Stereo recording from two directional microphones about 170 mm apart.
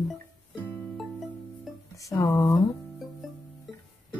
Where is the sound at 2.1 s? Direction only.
15° left (ahead or behind).